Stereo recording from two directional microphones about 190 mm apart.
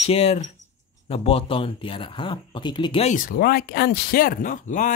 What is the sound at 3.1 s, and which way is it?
Speech, 50° left (ahead or behind).